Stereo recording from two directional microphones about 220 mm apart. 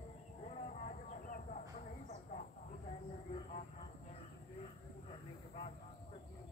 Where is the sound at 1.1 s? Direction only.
35° left (ahead or behind).